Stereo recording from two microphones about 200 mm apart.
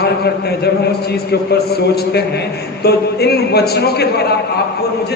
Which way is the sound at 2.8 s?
55° left (ahead or behind).